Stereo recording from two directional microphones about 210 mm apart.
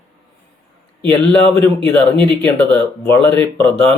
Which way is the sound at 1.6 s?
10° left (ahead or behind).